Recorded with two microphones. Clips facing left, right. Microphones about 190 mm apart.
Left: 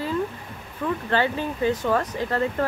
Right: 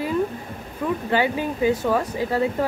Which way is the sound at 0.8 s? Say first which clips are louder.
Right 2 dB; 10° right (ahead or behind).